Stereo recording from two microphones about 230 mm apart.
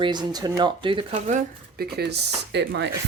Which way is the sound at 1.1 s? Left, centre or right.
Right.